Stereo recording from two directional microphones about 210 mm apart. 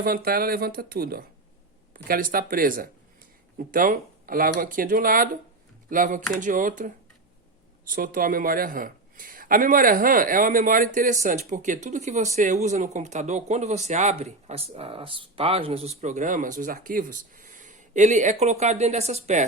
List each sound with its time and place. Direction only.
0.0 s speech: 45° right (ahead or behind)